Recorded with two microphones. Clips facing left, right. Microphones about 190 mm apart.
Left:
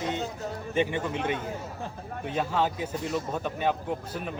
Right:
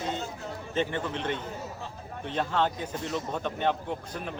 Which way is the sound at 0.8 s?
10° left (ahead or behind).